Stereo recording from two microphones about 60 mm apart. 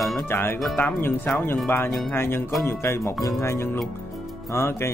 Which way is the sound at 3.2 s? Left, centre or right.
Left.